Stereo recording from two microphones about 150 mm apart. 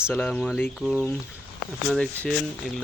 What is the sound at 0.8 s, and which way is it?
Speech, 5° right (ahead or behind).